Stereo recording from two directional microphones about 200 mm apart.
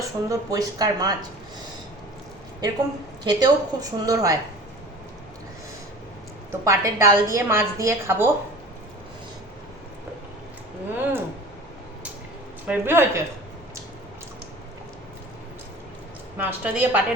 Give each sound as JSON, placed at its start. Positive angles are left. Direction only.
{"t": 0.3, "sound": "a woman's voice", "side_deg": -20}
{"t": 2.6, "sound": "a woman's voice", "side_deg": -20}
{"t": 6.5, "sound": "a woman's voice", "side_deg": -15}
{"t": 10.9, "sound": "a woman's voice", "side_deg": -10}
{"t": 12.6, "sound": "a woman's voice", "side_deg": -10}
{"t": 16.4, "sound": "a woman's voice", "side_deg": -10}